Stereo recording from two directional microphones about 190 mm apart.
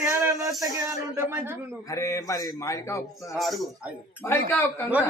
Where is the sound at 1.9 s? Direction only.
15° left (ahead or behind).